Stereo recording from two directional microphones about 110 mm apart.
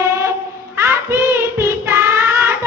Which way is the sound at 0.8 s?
20° right (ahead or behind).